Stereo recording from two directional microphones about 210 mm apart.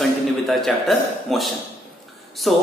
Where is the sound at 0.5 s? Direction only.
Centre (ahead or behind).